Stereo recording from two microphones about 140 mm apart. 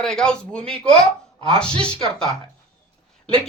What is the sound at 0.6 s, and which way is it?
Speech, 40° right (ahead or behind).